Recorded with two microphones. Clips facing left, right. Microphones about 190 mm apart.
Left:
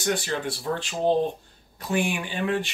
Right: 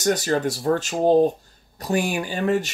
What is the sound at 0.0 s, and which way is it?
Speech, 40° right (ahead or behind).